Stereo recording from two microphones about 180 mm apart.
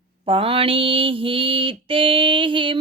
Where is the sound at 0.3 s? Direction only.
30° right (ahead or behind).